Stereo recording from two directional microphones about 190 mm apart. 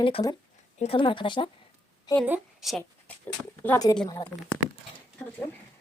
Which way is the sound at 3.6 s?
20° left (ahead or behind).